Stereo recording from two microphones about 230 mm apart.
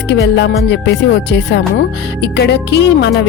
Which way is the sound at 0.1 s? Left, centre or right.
Left.